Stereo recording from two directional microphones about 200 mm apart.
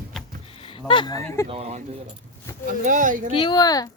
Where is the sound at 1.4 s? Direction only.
30° right (ahead or behind).